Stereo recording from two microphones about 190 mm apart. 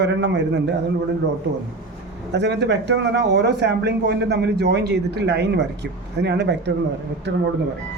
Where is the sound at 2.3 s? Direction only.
65° right (ahead or behind).